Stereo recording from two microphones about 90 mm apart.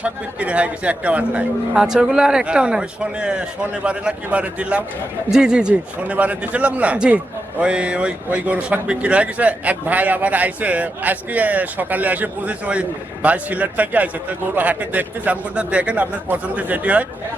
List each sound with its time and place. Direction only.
0.0 s speech: 15° right (ahead or behind)